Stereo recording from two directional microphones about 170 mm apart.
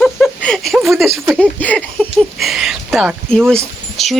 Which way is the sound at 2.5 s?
Centre (ahead or behind).